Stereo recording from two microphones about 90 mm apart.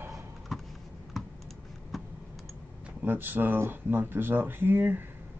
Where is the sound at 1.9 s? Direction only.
Centre (ahead or behind).